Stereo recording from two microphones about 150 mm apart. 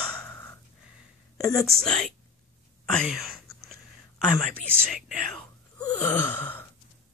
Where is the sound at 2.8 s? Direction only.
Centre (ahead or behind).